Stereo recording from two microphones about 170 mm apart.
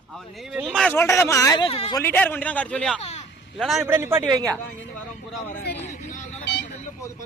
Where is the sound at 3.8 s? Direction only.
15° right (ahead or behind).